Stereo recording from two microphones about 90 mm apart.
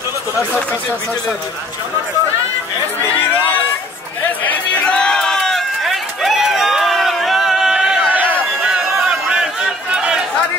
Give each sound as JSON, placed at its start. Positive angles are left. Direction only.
{"t": 3.1, "sound": "chatter", "side_deg": 20}
{"t": 4.5, "sound": "run", "side_deg": 10}
{"t": 8.1, "sound": "chatter", "side_deg": -20}
{"t": 8.7, "sound": "a sound", "side_deg": -5}